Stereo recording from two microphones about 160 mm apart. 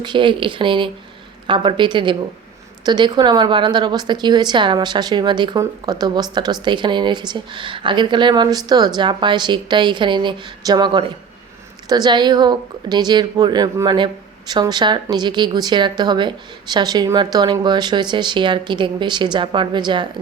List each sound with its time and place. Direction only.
0.0 s a woman's voice: 30° right (ahead or behind)